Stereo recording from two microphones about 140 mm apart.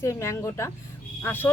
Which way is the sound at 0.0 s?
20° left (ahead or behind).